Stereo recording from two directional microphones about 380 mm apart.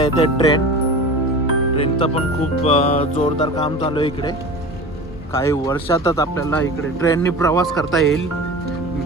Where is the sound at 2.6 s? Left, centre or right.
Centre.